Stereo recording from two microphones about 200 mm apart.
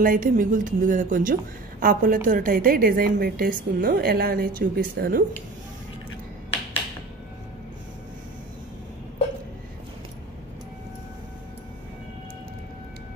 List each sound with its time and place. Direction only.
0.0 s a woman's voice: 45° right (ahead or behind)